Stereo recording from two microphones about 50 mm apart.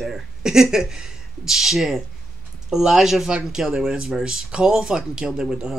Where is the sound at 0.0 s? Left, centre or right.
Centre.